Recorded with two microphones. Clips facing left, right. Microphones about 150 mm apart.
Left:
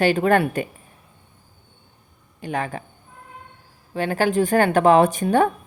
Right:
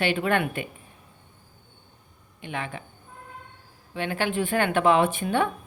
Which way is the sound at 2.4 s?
40° left (ahead or behind).